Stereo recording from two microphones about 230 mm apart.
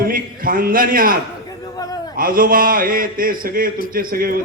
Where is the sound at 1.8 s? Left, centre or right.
Centre.